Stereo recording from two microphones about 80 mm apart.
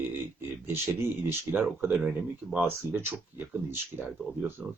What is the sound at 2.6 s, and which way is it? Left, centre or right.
Speech, right.